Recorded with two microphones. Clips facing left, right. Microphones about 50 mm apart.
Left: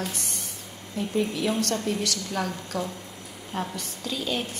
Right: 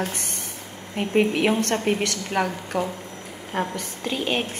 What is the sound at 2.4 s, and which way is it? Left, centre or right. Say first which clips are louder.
Speech: right 4 dB; right.